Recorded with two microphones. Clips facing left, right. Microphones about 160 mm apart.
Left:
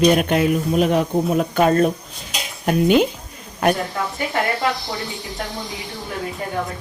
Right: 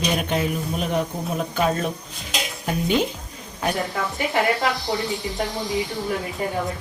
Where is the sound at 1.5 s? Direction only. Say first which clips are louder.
Left 7 dB; 60° left (ahead or behind).